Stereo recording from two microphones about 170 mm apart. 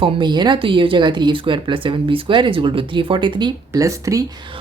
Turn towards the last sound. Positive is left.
turn(degrees=-20)  # may be behind; listen again after turning